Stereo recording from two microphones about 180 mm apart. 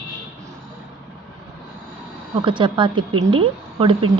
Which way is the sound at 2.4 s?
25° right (ahead or behind).